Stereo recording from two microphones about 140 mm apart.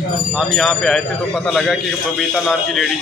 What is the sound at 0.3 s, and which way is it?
A man's voice, centre (ahead or behind).